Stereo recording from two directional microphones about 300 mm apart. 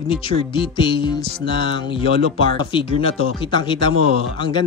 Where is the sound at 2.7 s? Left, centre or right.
Centre.